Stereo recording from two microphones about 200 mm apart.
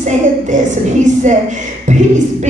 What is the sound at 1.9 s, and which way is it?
Speech, 35° right (ahead or behind).